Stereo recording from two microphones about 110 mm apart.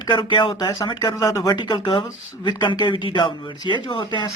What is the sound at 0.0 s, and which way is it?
Speech, 45° left (ahead or behind).